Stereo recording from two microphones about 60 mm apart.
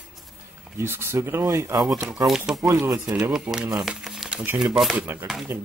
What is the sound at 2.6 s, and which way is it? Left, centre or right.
Speech, right.